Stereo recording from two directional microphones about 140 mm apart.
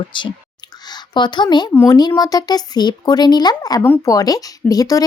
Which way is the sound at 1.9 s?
30° left (ahead or behind).